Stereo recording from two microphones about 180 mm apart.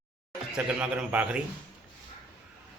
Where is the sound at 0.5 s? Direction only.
5° right (ahead or behind).